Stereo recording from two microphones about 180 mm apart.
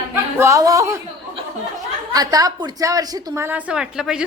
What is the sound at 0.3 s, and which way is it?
Speech, 15° right (ahead or behind).